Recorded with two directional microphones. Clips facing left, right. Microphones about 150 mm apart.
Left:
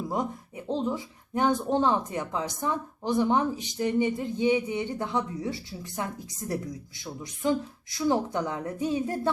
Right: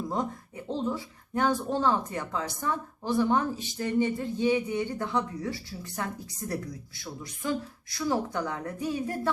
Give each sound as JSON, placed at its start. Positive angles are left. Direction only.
{"t": 0.1, "sound": "speech", "side_deg": 15}